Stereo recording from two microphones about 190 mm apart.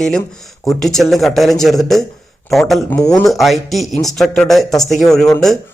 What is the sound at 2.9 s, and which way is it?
Speech, 20° left (ahead or behind).